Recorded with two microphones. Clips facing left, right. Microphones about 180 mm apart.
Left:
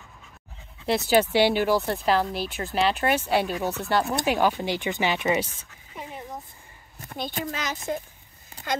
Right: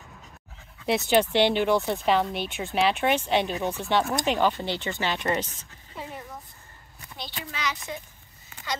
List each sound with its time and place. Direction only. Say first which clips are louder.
0.8 s speech: left 1 dB; centre (ahead or behind)
7.1 s speech: left 8 dB; 50° left (ahead or behind)